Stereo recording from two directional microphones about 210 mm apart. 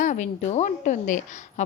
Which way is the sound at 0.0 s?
35° left (ahead or behind).